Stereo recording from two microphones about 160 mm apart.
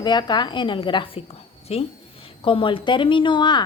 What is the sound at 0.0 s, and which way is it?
A woman's voice, 30° left (ahead or behind).